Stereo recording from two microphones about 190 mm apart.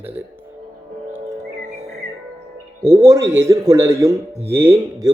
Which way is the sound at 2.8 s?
15° right (ahead or behind).